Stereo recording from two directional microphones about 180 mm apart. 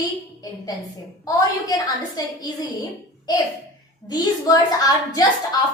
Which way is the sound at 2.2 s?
20° left (ahead or behind).